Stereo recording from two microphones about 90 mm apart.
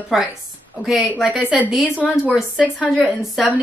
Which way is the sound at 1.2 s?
15° right (ahead or behind).